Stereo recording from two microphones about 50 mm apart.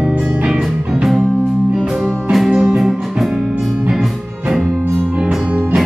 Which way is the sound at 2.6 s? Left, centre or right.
Centre.